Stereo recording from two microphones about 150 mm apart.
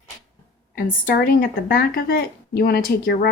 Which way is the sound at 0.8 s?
70° left (ahead or behind).